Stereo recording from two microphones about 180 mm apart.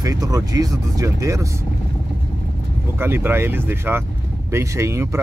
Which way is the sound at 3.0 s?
10° right (ahead or behind).